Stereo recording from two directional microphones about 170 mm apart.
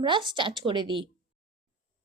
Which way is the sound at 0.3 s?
30° right (ahead or behind).